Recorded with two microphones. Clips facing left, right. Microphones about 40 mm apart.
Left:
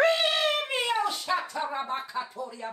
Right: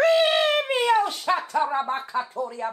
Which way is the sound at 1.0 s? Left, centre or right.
Right.